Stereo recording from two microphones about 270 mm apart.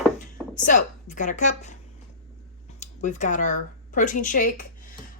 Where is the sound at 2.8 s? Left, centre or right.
Left.